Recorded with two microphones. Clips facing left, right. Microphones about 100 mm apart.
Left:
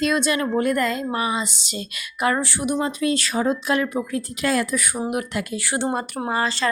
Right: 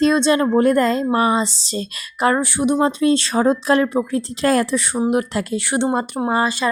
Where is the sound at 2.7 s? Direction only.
30° right (ahead or behind).